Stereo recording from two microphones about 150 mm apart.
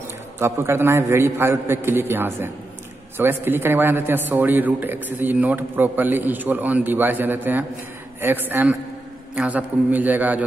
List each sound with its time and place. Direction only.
0.4 s a man's voice: 15° right (ahead or behind)